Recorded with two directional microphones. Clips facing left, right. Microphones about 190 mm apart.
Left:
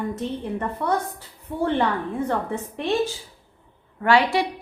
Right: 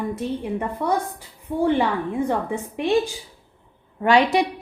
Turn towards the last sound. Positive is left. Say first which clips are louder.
# right 2 dB
turn(degrees=-20)  # may be behind; listen again after turning